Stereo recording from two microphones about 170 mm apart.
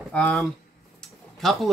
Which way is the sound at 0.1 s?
5° left (ahead or behind).